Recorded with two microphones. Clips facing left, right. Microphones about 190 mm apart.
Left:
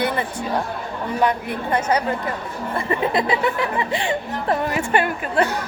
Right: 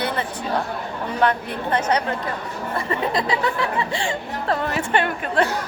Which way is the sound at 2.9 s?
20° left (ahead or behind).